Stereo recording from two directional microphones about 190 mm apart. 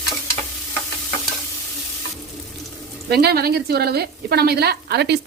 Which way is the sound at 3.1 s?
55° right (ahead or behind).